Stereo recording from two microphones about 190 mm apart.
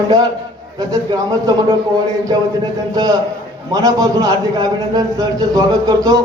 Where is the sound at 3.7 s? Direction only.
20° right (ahead or behind).